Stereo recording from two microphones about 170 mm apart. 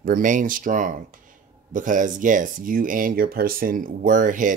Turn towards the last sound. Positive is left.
turn(degrees=-50)  # may be behind; listen again after turning